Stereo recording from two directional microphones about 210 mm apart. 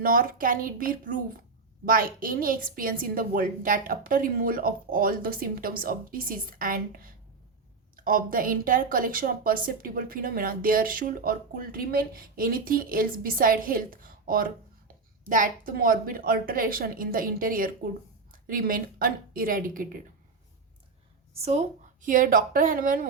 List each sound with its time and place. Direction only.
0.0 s a woman's voice: 40° right (ahead or behind)
22.0 s a woman's voice: 40° right (ahead or behind)